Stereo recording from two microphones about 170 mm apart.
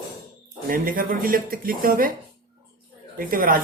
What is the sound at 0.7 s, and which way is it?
Speech, 55° right (ahead or behind).